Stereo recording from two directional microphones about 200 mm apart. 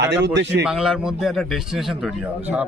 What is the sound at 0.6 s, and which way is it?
A man's voice, 5° right (ahead or behind).